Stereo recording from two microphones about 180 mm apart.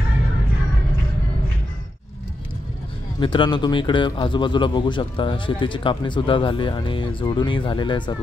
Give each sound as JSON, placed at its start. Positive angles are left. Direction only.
{"t": 3.2, "sound": "a man's voice", "side_deg": 25}